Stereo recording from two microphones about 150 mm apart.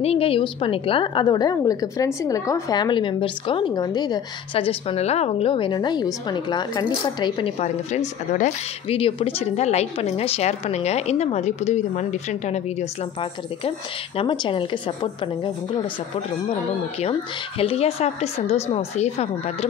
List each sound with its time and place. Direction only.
0.0 s a woman's voice: 40° left (ahead or behind)
7.5 s a woman's voice: 50° left (ahead or behind)
8.9 s a woman's voice: 40° left (ahead or behind)
13.2 s a woman's voice: 35° left (ahead or behind)
17.6 s a woman's voice: 40° left (ahead or behind)